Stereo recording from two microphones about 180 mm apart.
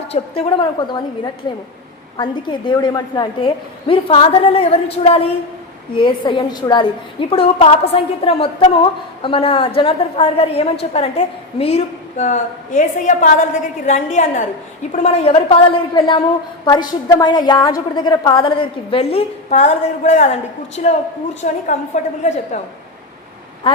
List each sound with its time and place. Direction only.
0.1 s a woman's voice: 30° left (ahead or behind)